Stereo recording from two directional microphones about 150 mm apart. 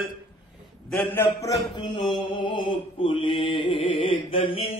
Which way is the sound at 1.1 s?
15° left (ahead or behind).